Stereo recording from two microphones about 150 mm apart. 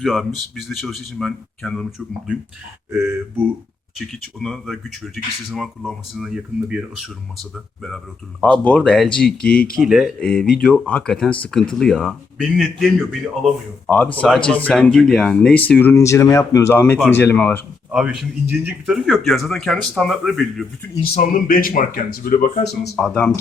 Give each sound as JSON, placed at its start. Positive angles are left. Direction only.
{"t": 0.0, "sound": "speech", "side_deg": 0}
{"t": 2.9, "sound": "speech", "side_deg": -15}
{"t": 3.9, "sound": "speech", "side_deg": 0}
{"t": 17.9, "sound": "speech", "side_deg": -5}
{"t": 18.9, "sound": "speech", "side_deg": 0}
{"t": 21.0, "sound": "speech", "side_deg": 75}
{"t": 22.7, "sound": "speech", "side_deg": 90}
{"t": 23.0, "sound": "speech", "side_deg": 5}